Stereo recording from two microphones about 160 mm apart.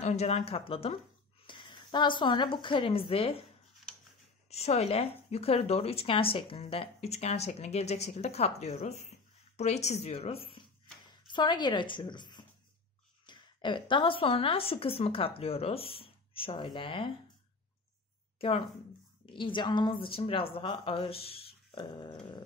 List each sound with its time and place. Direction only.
0.0 s a woman's voice: 45° left (ahead or behind)
4.5 s a woman's voice: 40° left (ahead or behind)
18.4 s a woman's voice: 35° left (ahead or behind)